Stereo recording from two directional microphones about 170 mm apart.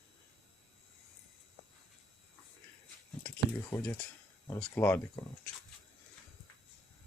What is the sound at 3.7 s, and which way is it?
Speech, 15° left (ahead or behind).